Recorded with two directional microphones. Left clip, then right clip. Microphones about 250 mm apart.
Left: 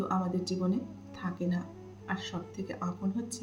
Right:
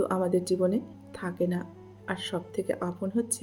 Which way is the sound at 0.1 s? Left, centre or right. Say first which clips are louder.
Right 7 dB; right.